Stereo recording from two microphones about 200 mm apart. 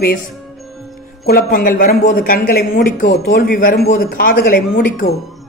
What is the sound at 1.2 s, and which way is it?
Speech, 50° left (ahead or behind).